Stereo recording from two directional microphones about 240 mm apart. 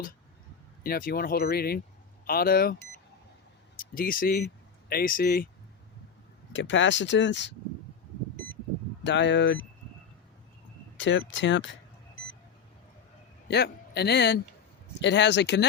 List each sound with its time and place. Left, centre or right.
0.9 s speech: left
3.9 s speech: left
6.5 s speech: left
9.0 s speech: left
10.9 s vehicle: left
13.5 s speech: left